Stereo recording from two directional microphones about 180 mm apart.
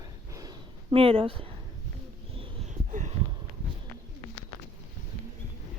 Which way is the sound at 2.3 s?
35° right (ahead or behind).